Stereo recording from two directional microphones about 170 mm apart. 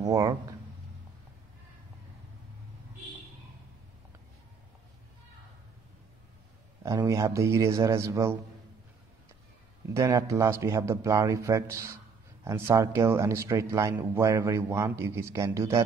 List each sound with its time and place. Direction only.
0.0 s speech: 20° right (ahead or behind)
6.8 s a man's voice: 20° right (ahead or behind)
9.9 s a man's voice: 20° right (ahead or behind)